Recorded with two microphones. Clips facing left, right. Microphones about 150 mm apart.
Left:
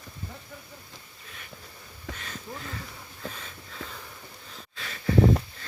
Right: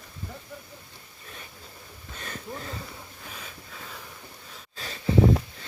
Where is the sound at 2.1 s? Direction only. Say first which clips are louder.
Left 5 dB; 90° left.